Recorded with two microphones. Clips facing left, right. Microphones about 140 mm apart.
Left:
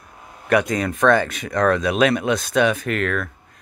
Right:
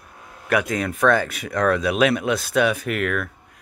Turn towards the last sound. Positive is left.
turn(degrees=-10)  # may be behind; listen again after turning